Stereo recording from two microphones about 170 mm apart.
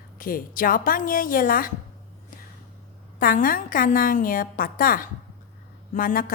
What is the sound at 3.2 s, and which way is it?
A woman's voice, 55° left (ahead or behind).